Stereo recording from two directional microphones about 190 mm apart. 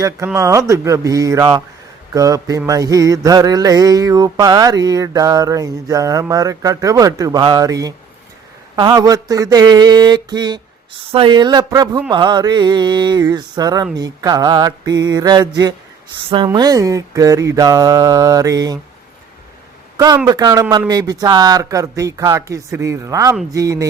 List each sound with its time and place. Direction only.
0.3 s speech: 15° right (ahead or behind)
2.1 s mantra: 20° right (ahead or behind)
20.2 s speech: 20° right (ahead or behind)